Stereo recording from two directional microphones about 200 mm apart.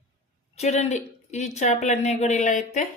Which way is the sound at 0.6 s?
35° left (ahead or behind).